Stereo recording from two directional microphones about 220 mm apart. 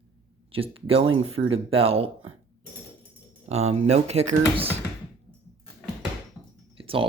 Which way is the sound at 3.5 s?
30° right (ahead or behind).